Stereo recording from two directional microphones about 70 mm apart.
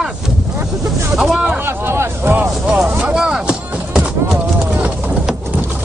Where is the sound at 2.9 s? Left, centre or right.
Centre.